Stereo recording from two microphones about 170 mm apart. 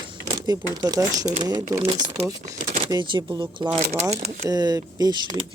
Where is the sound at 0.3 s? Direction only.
25° right (ahead or behind).